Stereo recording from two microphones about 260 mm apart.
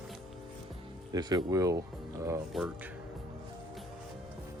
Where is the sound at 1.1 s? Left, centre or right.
Centre.